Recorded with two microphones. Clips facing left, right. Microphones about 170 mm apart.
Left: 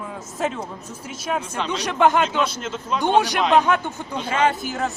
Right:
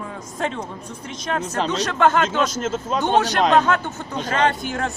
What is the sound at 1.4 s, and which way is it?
Speech, 40° right (ahead or behind).